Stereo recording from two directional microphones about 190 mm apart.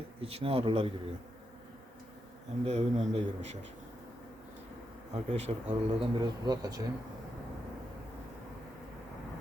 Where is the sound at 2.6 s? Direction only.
35° right (ahead or behind).